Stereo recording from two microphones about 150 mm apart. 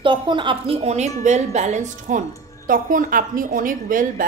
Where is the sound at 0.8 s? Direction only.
50° right (ahead or behind).